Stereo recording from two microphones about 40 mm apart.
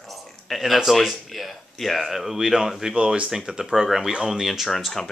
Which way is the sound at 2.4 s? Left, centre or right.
Centre.